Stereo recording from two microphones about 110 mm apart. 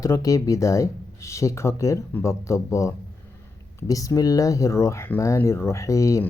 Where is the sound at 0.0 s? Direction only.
30° left (ahead or behind).